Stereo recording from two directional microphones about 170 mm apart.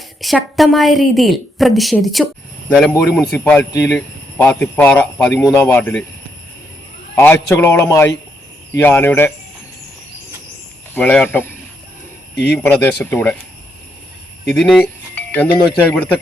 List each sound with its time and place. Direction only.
0.2 s a woman's voice: centre (ahead or behind)
3.7 s speech: 20° left (ahead or behind)
7.2 s speech: 15° left (ahead or behind)
10.9 s speech: 10° left (ahead or behind)
14.5 s speech: 5° left (ahead or behind)